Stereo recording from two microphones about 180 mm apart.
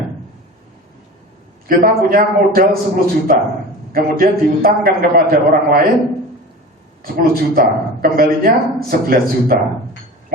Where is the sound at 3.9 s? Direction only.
55° right (ahead or behind).